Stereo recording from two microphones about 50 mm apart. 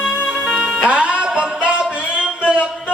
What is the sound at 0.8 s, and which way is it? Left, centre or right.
Music, right.